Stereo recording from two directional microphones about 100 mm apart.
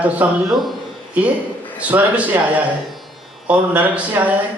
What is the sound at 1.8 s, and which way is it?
Speech, 15° right (ahead or behind).